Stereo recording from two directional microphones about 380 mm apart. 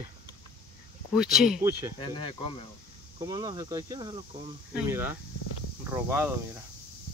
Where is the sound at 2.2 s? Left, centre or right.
Centre.